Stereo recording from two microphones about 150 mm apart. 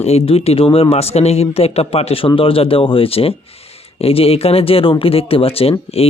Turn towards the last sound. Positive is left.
turn(degrees=40)  # may be behind; listen again after turning